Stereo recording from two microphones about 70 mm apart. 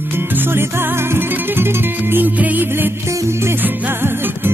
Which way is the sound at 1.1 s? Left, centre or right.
Right.